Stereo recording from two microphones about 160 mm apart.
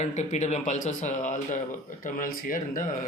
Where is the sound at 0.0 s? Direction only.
45° left (ahead or behind).